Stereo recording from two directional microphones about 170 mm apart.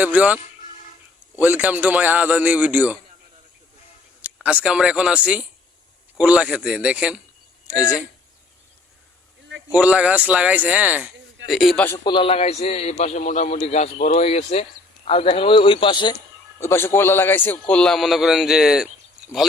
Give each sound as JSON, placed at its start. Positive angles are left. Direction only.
{"t": 0.0, "sound": "a man's voice", "side_deg": -10}
{"t": 1.4, "sound": "a man's voice", "side_deg": -10}
{"t": 4.4, "sound": "a man's voice", "side_deg": -5}
{"t": 9.6, "sound": "a man's voice", "side_deg": -10}
{"t": 12.0, "sound": "a man's voice", "side_deg": 30}
{"t": 16.6, "sound": "a man's voice", "side_deg": 15}